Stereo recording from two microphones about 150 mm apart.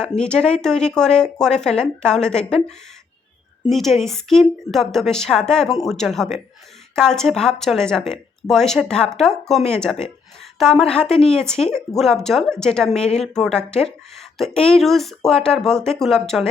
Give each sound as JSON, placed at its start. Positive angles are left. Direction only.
{"t": 0.0, "sound": "a woman's voice", "side_deg": 5}
{"t": 3.7, "sound": "a woman's voice", "side_deg": 0}